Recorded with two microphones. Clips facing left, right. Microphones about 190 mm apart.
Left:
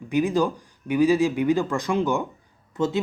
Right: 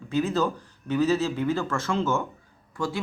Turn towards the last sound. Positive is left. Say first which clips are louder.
# left 6 dB
turn(degrees=20)  # may be behind; listen again after turning